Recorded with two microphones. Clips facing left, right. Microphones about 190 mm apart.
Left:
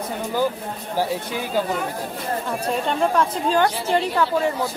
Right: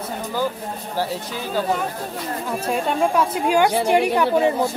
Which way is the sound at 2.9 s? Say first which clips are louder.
Right 1 dB; 10° right (ahead or behind).